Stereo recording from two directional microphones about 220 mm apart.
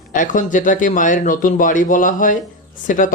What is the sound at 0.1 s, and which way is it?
Speech, 35° left (ahead or behind).